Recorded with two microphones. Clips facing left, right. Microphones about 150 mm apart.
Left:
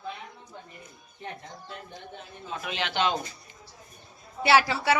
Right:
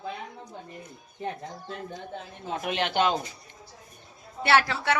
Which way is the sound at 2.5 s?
50° right (ahead or behind).